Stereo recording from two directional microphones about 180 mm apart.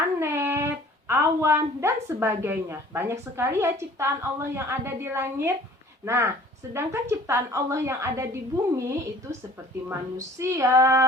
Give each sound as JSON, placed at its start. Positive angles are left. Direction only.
{"t": 0.2, "sound": "a woman's voice", "side_deg": -15}
{"t": 10.4, "sound": "a woman's voice", "side_deg": -15}